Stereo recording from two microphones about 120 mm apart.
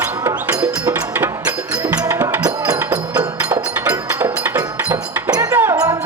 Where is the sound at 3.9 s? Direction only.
15° right (ahead or behind).